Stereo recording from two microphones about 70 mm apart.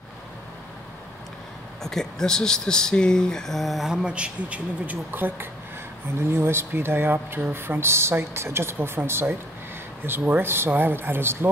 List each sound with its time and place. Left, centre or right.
1.8 s speech: centre; by 11.3 s right